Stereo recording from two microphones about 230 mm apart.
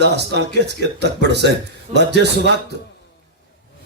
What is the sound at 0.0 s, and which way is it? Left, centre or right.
Speech, right.